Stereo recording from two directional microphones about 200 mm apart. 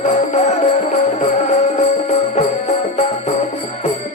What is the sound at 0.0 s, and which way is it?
Music, 35° left (ahead or behind).